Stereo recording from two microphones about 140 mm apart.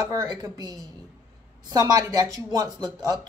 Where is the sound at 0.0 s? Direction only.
25° right (ahead or behind).